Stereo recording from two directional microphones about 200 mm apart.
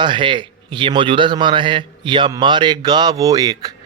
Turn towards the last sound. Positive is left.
turn(degrees=-20)  # may be behind; listen again after turning